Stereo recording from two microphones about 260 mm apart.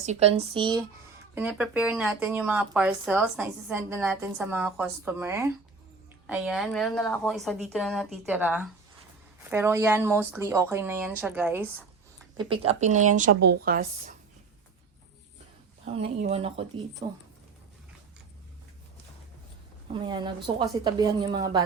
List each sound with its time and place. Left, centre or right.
0.0 s speech: right
1.4 s speech: centre
12.4 s speech: right
16.0 s speech: right
19.9 s speech: centre